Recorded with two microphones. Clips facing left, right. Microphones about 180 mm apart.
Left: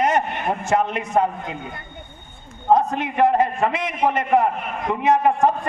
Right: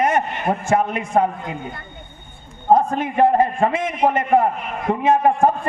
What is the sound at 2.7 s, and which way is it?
A man's voice, 50° right (ahead or behind).